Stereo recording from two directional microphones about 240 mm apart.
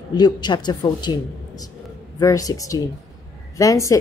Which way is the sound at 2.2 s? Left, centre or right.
Centre.